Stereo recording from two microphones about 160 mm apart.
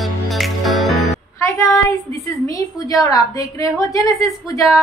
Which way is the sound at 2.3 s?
20° left (ahead or behind).